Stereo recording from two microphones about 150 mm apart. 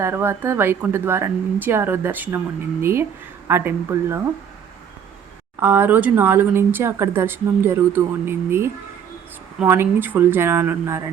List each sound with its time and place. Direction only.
0.0 s speech: 15° right (ahead or behind)
5.5 s speech: 15° right (ahead or behind)